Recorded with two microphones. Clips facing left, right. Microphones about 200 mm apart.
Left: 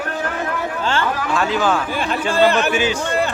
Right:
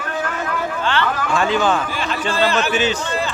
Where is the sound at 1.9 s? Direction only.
55° left (ahead or behind).